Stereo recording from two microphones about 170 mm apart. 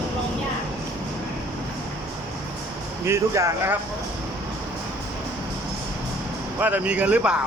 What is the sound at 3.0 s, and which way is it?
Speech, 15° right (ahead or behind).